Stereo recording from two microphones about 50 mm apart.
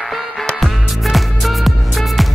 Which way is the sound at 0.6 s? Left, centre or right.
Centre.